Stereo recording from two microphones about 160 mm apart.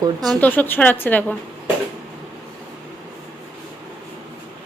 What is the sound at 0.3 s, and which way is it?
Speech, 10° left (ahead or behind).